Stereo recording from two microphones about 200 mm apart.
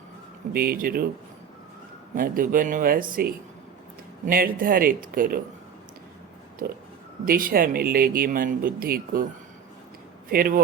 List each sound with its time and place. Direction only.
0.5 s speech: 45° right (ahead or behind)
2.1 s speech: 45° right (ahead or behind)
7.3 s speech: 45° right (ahead or behind)
10.2 s speech: 45° right (ahead or behind)